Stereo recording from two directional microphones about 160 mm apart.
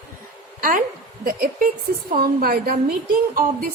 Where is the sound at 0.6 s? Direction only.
60° right (ahead or behind).